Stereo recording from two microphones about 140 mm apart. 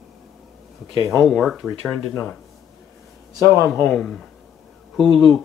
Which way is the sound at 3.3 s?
20° right (ahead or behind).